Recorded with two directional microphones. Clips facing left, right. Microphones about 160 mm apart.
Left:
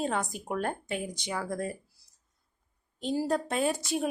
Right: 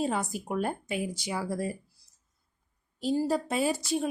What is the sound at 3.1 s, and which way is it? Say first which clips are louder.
Speech: right 1 dB; 5° right (ahead or behind).